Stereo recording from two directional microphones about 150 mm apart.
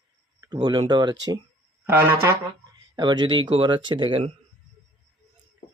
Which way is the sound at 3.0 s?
30° right (ahead or behind).